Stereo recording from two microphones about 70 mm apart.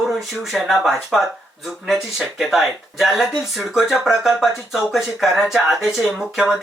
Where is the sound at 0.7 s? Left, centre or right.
Centre.